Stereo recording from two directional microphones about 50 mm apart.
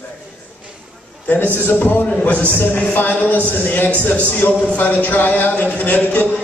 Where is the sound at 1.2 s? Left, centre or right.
Left.